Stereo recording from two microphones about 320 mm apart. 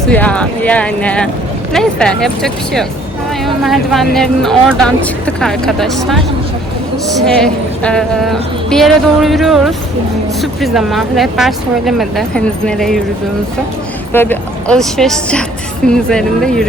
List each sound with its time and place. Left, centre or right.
0.1 s speech: centre
14.1 s speech: centre